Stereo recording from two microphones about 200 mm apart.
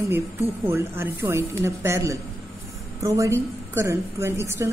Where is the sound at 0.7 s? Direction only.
10° right (ahead or behind).